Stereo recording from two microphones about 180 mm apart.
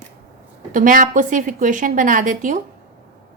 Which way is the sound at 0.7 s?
45° right (ahead or behind).